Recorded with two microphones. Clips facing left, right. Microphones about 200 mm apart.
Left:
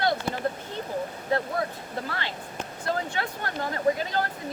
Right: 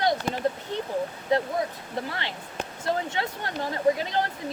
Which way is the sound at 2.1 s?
20° right (ahead or behind).